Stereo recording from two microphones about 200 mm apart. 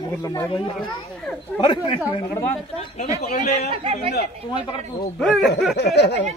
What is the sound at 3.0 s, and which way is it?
Speech, 35° left (ahead or behind).